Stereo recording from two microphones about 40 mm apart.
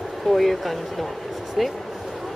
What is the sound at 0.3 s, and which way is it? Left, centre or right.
Speech, centre.